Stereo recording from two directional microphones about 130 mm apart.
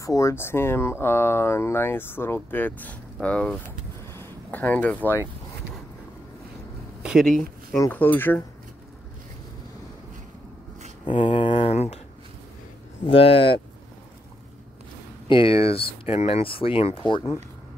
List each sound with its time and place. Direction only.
0.0 s speech: 25° left (ahead or behind); by 3.5 s 10° left (ahead or behind)
4.1 s a sound: 15° left (ahead or behind)
7.0 s speech: 5° right (ahead or behind)
7.9 s speech: 15° left (ahead or behind)
11.1 s speech: 40° left (ahead or behind)
13.0 s speech: 45° left (ahead or behind)
15.2 s speech: 45° left (ahead or behind)